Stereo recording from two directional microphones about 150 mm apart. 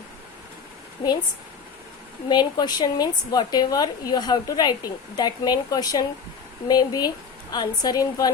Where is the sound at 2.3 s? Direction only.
30° left (ahead or behind).